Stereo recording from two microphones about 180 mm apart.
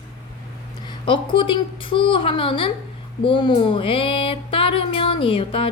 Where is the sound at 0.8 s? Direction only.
25° left (ahead or behind).